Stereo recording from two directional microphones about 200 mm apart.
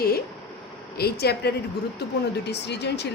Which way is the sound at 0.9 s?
50° left (ahead or behind).